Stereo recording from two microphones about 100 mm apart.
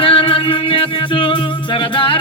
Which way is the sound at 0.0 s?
65° left (ahead or behind).